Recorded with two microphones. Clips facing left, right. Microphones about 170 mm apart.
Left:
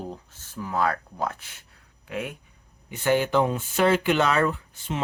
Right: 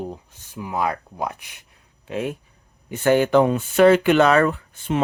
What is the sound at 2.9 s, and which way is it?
Speech, 50° right (ahead or behind).